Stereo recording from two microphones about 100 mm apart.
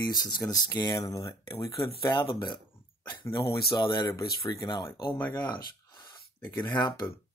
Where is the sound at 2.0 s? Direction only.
50° left (ahead or behind).